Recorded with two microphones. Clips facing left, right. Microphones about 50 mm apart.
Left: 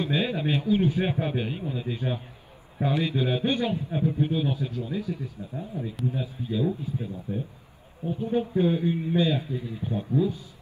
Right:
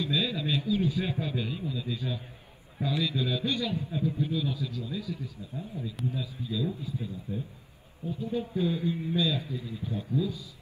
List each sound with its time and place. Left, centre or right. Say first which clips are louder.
0.0 s a man's voice: left 3 dB; left
8.0 s a man's voice: left 6 dB; left